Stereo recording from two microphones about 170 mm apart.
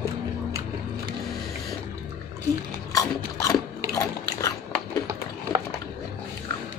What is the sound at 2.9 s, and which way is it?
Biting, 20° left (ahead or behind).